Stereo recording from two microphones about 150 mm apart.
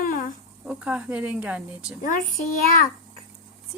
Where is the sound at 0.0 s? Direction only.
60° left (ahead or behind).